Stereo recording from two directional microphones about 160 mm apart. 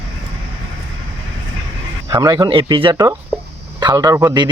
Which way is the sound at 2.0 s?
25° right (ahead or behind).